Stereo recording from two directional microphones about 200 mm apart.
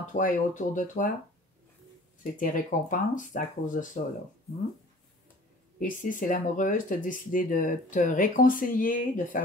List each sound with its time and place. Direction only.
0.0 s speech: 40° left (ahead or behind)
2.3 s speech: 40° left (ahead or behind)
5.8 s speech: 40° left (ahead or behind)